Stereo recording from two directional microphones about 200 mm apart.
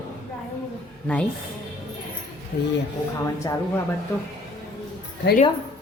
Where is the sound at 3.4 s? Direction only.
15° left (ahead or behind).